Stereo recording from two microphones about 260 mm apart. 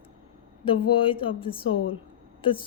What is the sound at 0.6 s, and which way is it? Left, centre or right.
Speech, centre.